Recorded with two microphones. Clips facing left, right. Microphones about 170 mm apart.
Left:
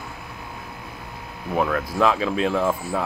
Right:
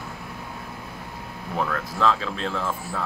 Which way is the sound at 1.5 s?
15° left (ahead or behind).